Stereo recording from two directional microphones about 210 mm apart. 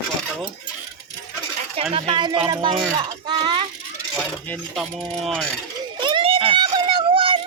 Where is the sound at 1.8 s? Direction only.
25° right (ahead or behind).